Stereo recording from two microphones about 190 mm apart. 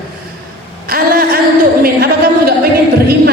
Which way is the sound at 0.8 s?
50° right (ahead or behind).